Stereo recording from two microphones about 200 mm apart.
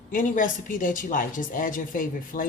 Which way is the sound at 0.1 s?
40° left (ahead or behind).